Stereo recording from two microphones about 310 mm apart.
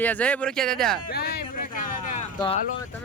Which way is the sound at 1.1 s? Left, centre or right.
Left.